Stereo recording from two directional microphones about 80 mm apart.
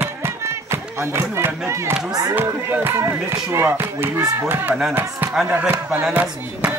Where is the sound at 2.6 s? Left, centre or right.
Right.